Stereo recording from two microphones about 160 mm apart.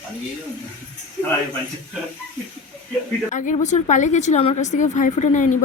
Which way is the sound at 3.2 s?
50° left (ahead or behind).